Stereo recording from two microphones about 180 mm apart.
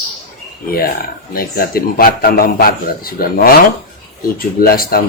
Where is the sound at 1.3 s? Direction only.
55° left (ahead or behind).